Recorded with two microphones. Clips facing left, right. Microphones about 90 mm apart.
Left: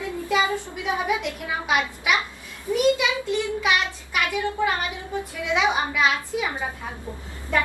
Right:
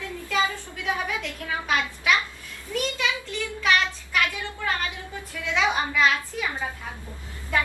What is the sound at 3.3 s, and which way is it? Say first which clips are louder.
Child singing: right 1 dB; 15° left (ahead or behind).